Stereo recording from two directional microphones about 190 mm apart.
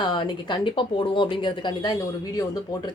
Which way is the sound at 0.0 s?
25° left (ahead or behind).